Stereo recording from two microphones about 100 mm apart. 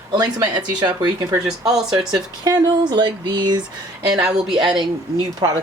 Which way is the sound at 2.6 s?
50° right (ahead or behind).